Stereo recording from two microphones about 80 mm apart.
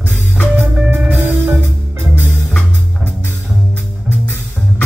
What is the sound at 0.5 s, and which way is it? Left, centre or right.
Music, right.